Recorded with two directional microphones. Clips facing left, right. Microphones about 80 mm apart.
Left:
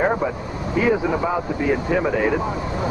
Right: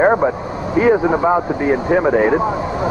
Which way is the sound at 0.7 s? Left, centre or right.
Right.